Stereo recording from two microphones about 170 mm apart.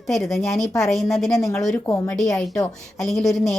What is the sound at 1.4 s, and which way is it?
Speech, 20° left (ahead or behind).